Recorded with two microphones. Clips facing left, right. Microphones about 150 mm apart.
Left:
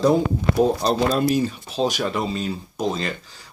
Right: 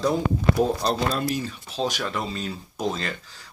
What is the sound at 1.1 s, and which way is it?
Speech, 15° left (ahead or behind).